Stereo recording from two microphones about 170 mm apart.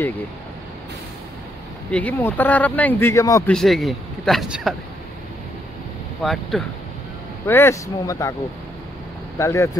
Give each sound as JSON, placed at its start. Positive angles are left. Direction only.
{"t": 1.9, "sound": "speech", "side_deg": 10}
{"t": 3.4, "sound": "speech", "side_deg": 0}
{"t": 6.2, "sound": "speech", "side_deg": 0}
{"t": 7.4, "sound": "speech", "side_deg": 15}
{"t": 9.4, "sound": "speech", "side_deg": 15}